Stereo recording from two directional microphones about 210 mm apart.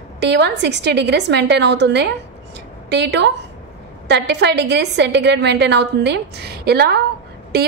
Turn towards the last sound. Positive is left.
turn(degrees=-50)  # may be behind; listen again after turning